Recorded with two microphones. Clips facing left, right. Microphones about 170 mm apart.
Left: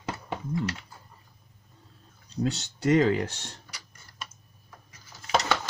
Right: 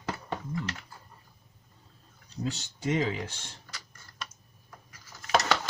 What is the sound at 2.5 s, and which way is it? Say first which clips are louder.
Speech: left 7 dB; 75° left (ahead or behind).